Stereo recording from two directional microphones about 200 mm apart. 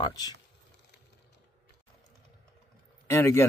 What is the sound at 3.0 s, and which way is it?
Speech, 15° left (ahead or behind).